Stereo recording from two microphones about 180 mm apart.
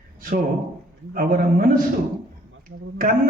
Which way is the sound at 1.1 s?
50° right (ahead or behind).